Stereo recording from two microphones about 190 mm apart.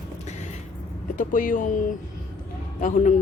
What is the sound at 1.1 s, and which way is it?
Speech, 45° left (ahead or behind).